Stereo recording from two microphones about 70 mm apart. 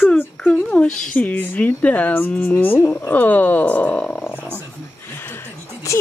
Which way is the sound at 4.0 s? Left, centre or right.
Centre.